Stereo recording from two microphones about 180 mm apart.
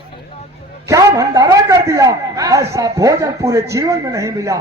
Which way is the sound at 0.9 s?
20° right (ahead or behind).